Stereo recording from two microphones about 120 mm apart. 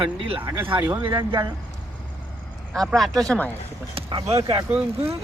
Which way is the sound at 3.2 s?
15° left (ahead or behind).